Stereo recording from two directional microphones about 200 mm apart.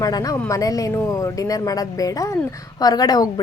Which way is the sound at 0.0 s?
20° left (ahead or behind).